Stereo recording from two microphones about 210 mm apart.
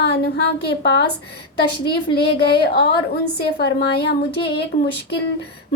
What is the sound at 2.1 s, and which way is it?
Speech, 50° left (ahead or behind).